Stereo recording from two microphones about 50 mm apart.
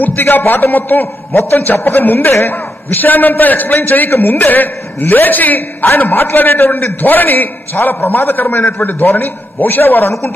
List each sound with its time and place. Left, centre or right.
0.0 s a man's voice: left